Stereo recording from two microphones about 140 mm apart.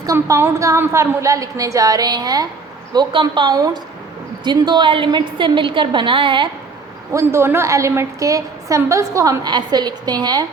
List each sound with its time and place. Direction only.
0.0 s a woman's voice: 25° right (ahead or behind)
7.1 s a woman's voice: 20° right (ahead or behind)